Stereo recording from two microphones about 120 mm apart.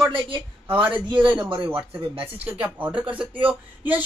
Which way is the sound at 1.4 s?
45° right (ahead or behind).